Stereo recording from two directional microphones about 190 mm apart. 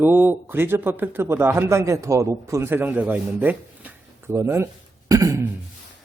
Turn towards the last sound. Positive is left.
turn(degrees=-15)  # may be behind; listen again after turning